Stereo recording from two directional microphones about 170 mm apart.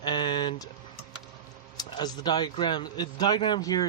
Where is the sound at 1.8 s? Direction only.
25° left (ahead or behind).